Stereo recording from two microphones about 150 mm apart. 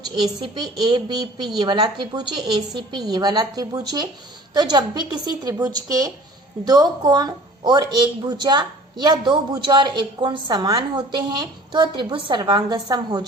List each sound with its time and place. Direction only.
0.4 s a woman's voice: 30° right (ahead or behind)